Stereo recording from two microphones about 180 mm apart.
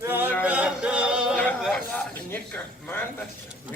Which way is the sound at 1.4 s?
10° left (ahead or behind).